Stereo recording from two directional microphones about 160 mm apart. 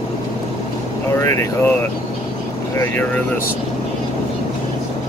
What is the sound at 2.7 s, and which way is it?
Speech, 15° left (ahead or behind).